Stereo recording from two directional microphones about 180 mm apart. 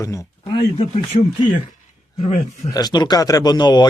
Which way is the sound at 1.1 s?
30° left (ahead or behind).